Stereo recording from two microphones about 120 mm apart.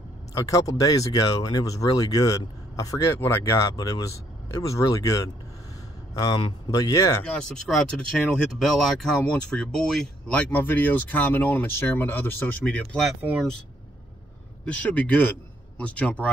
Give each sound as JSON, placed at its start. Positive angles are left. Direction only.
{"t": 0.3, "sound": "speech", "side_deg": 30}
{"t": 6.7, "sound": "speech", "side_deg": 25}
{"t": 7.4, "sound": "speech", "side_deg": 5}
{"t": 14.6, "sound": "speech", "side_deg": 10}